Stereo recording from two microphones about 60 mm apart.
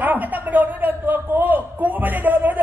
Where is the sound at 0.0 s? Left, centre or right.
Right.